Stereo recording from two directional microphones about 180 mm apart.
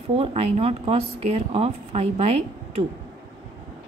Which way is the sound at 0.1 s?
35° right (ahead or behind).